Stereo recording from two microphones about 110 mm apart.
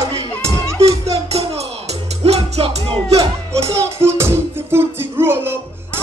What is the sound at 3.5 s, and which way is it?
Music, 25° right (ahead or behind).